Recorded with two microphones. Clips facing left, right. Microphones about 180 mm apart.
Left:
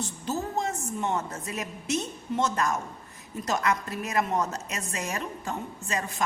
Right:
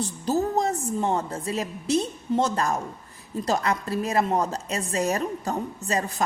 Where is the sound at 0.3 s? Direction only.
35° right (ahead or behind).